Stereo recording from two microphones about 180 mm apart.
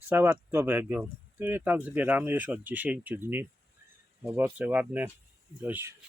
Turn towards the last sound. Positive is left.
turn(degrees=-10)  # may be behind; listen again after turning